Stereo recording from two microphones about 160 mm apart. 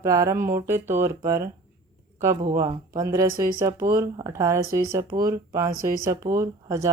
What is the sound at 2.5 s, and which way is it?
Speech, 25° right (ahead or behind).